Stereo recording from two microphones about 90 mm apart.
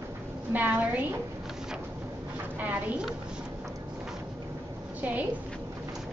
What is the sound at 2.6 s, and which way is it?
Speech, 10° right (ahead or behind).